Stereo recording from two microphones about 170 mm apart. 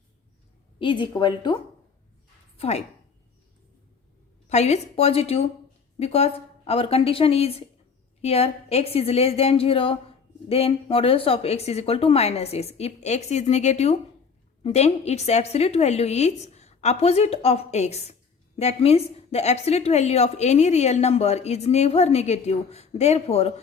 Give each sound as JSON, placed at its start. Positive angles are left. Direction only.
{"t": 0.8, "sound": "a woman's voice", "side_deg": 30}
{"t": 2.6, "sound": "a woman's voice", "side_deg": 35}
{"t": 4.4, "sound": "a woman's voice", "side_deg": 40}